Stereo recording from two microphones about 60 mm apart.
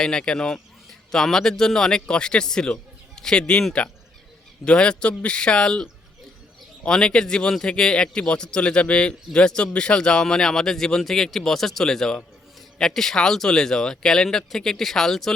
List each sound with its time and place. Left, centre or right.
0.0 s a man's voice: centre